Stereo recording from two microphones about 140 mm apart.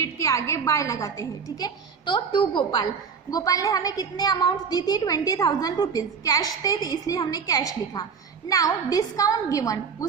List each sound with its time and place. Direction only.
0.0 s a woman's voice: 20° left (ahead or behind)